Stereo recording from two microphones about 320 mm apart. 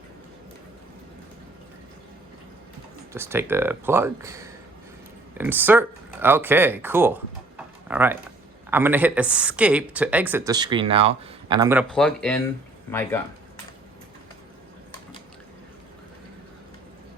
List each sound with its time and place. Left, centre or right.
3.1 s speech: centre